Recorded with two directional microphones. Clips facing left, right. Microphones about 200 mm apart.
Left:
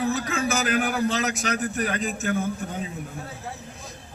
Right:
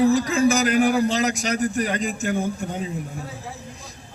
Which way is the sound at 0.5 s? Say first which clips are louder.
Right 5 dB; 5° left (ahead or behind).